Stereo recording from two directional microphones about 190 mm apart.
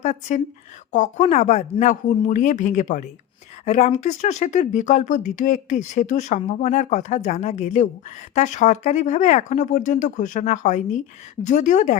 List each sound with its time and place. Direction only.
0.0 s speech: 40° left (ahead or behind)